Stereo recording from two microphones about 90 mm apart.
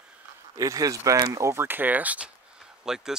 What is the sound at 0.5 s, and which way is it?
Speech, 40° right (ahead or behind).